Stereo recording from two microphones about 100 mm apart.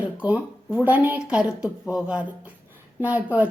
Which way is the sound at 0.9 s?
15° right (ahead or behind).